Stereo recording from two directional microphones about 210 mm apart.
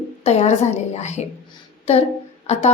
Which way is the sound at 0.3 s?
30° left (ahead or behind).